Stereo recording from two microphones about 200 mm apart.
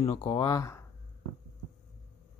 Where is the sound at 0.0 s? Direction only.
30° left (ahead or behind).